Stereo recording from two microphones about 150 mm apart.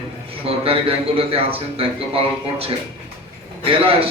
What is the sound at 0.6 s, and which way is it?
Speech, 40° right (ahead or behind).